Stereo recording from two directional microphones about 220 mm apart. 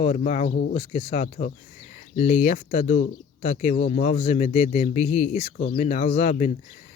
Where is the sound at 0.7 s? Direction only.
25° left (ahead or behind).